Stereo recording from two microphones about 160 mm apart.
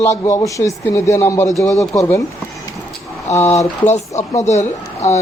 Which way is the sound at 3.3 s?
45° left (ahead or behind).